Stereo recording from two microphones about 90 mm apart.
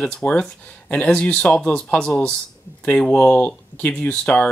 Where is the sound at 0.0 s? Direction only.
10° left (ahead or behind).